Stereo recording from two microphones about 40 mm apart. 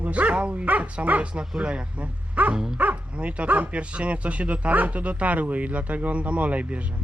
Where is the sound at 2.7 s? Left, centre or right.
Right.